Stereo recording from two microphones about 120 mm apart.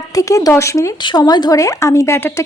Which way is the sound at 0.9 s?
35° left (ahead or behind).